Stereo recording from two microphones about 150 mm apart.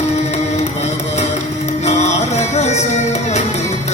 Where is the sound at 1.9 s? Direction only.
50° left (ahead or behind).